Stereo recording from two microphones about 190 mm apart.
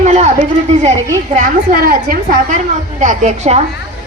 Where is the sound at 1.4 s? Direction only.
50° right (ahead or behind).